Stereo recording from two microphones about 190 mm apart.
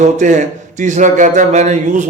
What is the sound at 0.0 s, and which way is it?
A man's voice, 40° right (ahead or behind).